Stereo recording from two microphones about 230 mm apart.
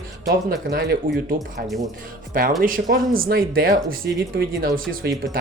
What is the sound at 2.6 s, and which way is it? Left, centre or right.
Speech, right.